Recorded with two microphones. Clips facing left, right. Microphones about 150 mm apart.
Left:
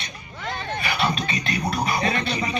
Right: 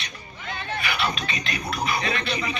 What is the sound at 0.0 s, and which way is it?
Speech, 35° left (ahead or behind).